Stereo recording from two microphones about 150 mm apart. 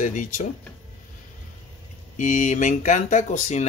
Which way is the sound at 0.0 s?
55° left (ahead or behind).